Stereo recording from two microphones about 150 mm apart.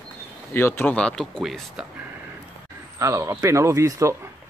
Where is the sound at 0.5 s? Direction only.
15° left (ahead or behind).